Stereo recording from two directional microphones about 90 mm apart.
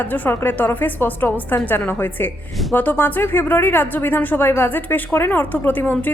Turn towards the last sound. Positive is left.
turn(degrees=20)  # may be behind; listen again after turning